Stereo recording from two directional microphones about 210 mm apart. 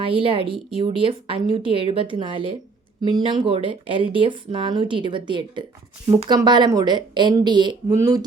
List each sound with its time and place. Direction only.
0.0 s speech: 25° right (ahead or behind)